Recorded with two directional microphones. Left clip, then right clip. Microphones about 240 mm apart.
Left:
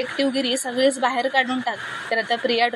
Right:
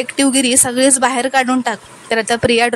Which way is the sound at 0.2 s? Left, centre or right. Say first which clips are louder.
Right 9 dB; right.